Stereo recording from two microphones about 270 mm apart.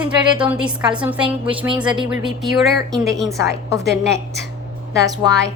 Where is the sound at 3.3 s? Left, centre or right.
Centre.